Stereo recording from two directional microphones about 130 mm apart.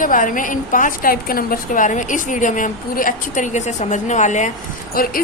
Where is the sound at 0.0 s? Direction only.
90° left; by 4.5 s 70° left (ahead or behind).